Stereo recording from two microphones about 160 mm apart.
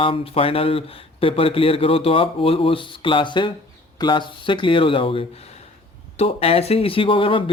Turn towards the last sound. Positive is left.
turn(degrees=35)  # may be behind; listen again after turning